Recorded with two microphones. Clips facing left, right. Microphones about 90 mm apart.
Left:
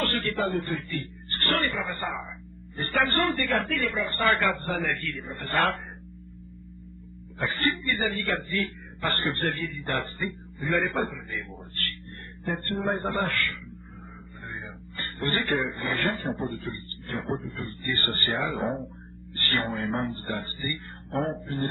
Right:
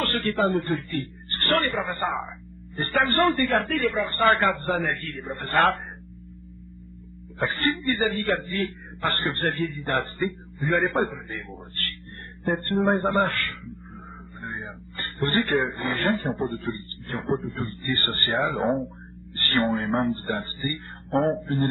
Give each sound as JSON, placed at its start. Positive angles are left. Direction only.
{"t": 0.0, "sound": "a man's voice", "side_deg": -40}
{"t": 7.3, "sound": "a man's voice", "side_deg": -35}